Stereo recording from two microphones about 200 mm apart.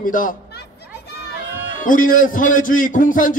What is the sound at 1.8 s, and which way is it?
A man's voice, 45° left (ahead or behind).